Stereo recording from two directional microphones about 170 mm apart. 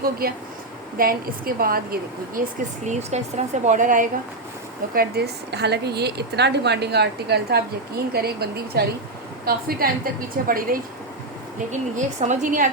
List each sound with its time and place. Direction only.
0.0 s a woman's voice: 60° right (ahead or behind)
4.9 s a woman's voice: 70° right (ahead or behind)
12.3 s a woman's voice: 50° right (ahead or behind)